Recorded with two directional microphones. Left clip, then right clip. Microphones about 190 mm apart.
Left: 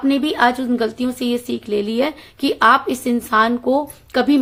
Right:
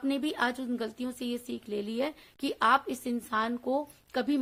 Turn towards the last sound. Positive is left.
turn(degrees=-30)  # may be behind; listen again after turning